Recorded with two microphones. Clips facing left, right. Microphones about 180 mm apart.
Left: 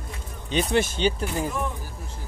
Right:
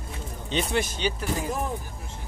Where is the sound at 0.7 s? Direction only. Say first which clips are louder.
Left 7 dB; 25° left (ahead or behind).